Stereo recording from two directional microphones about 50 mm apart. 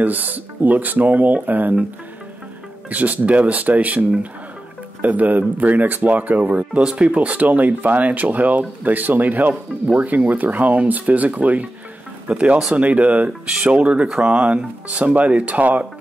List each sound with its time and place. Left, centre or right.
0.0 s speech: right
2.9 s speech: right
6.8 s speech: centre